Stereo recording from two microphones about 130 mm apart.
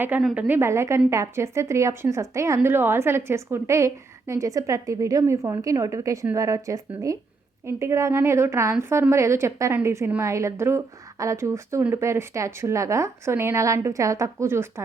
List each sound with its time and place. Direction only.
0.3 s a woman's voice: 15° right (ahead or behind)